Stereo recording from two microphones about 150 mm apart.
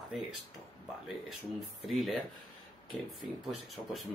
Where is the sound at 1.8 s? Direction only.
Centre (ahead or behind).